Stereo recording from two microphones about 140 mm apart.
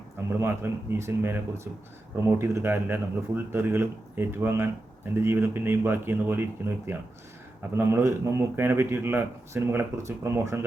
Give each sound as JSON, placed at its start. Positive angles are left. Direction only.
{"t": 0.3, "sound": "a man's voice", "side_deg": -15}